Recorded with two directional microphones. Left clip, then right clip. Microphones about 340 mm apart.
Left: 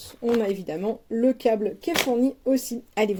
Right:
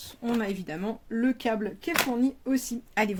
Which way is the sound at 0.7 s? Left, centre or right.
Centre.